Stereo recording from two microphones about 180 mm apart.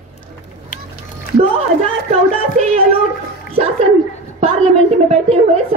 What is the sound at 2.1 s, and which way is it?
Speech, 40° right (ahead or behind).